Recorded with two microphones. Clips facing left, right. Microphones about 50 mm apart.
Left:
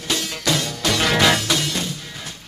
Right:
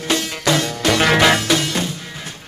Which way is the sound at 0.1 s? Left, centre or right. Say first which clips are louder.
Right 4 dB; right.